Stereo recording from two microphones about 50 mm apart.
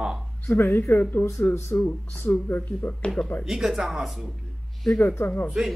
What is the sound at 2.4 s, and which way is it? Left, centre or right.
Speech, left.